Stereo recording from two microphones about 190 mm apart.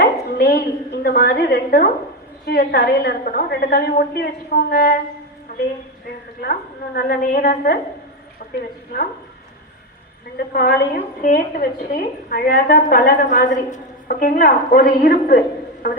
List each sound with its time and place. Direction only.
0.0 s a woman's voice: 55° left (ahead or behind)
6.4 s a woman's voice: 50° left (ahead or behind)
10.3 s a woman's voice: 50° left (ahead or behind)